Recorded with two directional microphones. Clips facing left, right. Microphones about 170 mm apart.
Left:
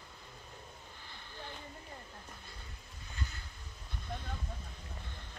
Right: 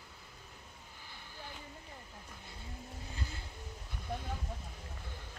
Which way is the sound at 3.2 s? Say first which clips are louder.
Left 1 dB; 30° right (ahead or behind).